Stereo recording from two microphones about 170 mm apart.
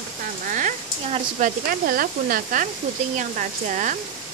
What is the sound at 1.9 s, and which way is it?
Speech, 55° right (ahead or behind).